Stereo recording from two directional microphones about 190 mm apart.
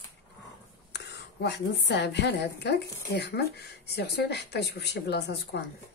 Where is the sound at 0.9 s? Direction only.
65° left (ahead or behind).